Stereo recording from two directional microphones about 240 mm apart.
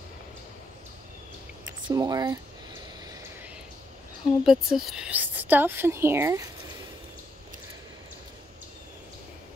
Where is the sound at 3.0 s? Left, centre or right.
Centre.